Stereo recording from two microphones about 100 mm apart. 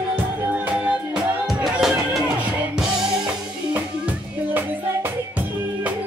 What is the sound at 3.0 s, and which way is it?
Music, 10° right (ahead or behind).